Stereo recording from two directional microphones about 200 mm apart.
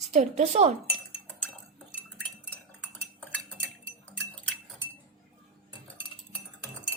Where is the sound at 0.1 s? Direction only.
35° right (ahead or behind).